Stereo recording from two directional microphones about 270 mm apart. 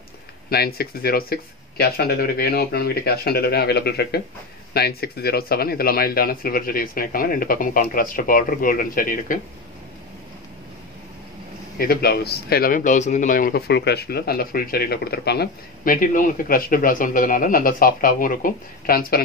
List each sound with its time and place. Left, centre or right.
0.5 s speech: left
11.8 s speech: left